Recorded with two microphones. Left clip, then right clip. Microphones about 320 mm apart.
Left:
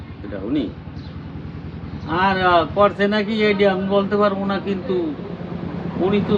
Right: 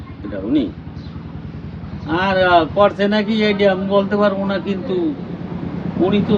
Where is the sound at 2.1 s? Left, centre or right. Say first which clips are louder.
Right 2 dB; centre.